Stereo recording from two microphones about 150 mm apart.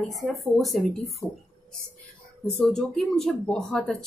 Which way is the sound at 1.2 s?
15° left (ahead or behind).